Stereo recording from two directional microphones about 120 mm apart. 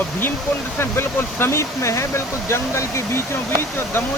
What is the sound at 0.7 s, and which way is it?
Speech, 20° left (ahead or behind).